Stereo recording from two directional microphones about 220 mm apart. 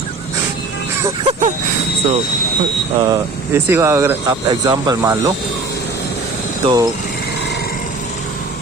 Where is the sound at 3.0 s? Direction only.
15° right (ahead or behind).